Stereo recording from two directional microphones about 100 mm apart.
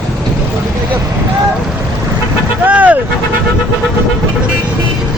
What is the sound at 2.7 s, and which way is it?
Vehicle, 15° right (ahead or behind).